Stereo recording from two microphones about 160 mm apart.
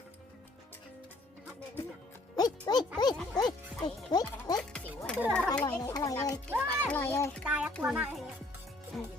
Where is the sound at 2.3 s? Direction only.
25° left (ahead or behind).